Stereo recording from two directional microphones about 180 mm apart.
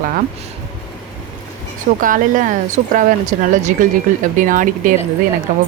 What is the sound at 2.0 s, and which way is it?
Speech, 50° right (ahead or behind).